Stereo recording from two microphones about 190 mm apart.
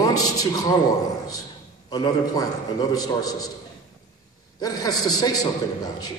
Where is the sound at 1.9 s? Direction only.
20° left (ahead or behind).